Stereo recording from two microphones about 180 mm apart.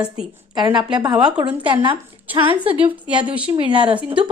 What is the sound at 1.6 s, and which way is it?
Speech, 25° right (ahead or behind).